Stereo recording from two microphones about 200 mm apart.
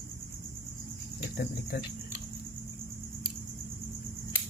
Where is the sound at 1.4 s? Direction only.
50° left (ahead or behind).